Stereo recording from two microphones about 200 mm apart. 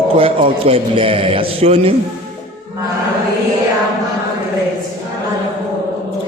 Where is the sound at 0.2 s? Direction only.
25° right (ahead or behind).